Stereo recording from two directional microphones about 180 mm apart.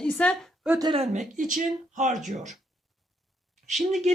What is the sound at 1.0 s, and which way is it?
Speech, 40° right (ahead or behind).